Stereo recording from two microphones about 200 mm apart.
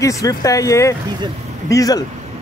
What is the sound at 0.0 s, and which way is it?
A man's voice, 15° left (ahead or behind).